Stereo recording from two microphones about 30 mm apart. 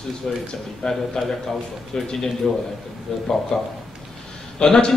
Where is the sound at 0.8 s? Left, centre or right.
Left.